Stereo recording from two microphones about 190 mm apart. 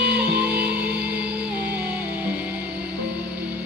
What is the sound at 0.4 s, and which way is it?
Music, 5° right (ahead or behind).